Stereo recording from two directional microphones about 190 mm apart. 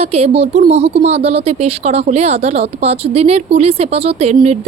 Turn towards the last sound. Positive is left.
turn(degrees=-35)  # may be behind; listen again after turning